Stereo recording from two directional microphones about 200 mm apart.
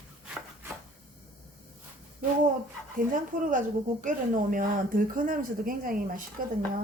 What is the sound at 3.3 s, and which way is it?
Speech, 40° right (ahead or behind).